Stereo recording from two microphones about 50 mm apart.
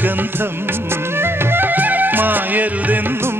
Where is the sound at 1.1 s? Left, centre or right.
Right.